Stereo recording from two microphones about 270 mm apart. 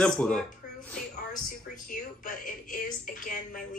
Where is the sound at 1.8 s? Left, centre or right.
Left.